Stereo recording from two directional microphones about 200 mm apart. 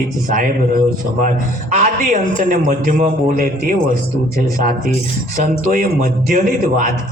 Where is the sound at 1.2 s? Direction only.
40° right (ahead or behind).